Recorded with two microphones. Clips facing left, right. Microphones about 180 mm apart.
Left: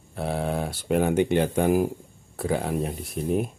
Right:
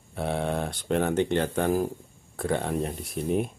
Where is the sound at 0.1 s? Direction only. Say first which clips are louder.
Left 1 dB; centre (ahead or behind).